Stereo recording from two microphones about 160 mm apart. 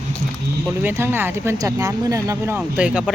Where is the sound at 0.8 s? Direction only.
15° right (ahead or behind).